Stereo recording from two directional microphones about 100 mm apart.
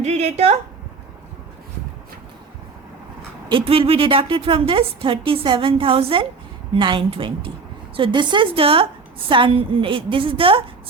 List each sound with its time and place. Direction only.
0.2 s speech: 90° right
3.5 s a woman's voice: 70° right (ahead or behind)
6.7 s a woman's voice: 55° right (ahead or behind)